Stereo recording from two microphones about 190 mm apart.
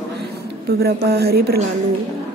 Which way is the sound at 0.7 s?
55° right (ahead or behind).